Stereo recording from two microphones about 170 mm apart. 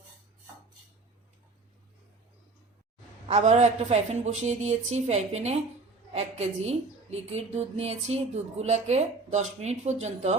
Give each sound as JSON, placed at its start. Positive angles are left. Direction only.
{"t": 3.2, "sound": "a woman's voice", "side_deg": -40}